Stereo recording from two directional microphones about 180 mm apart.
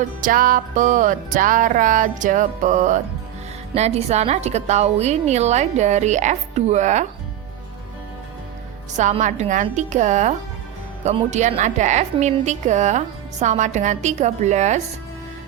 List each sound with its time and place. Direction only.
0.2 s music: 50° right (ahead or behind)
3.8 s a woman's voice: 35° right (ahead or behind)
8.9 s music: 40° right (ahead or behind)
9.6 s a woman's voice: 40° right (ahead or behind)